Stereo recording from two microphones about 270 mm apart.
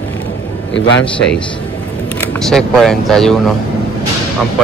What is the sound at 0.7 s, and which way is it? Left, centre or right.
Speech, left.